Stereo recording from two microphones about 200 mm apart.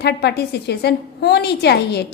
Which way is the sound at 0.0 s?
55° left (ahead or behind).